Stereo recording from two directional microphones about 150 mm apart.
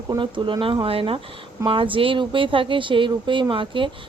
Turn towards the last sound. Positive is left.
turn(degrees=-35)  # may be behind; listen again after turning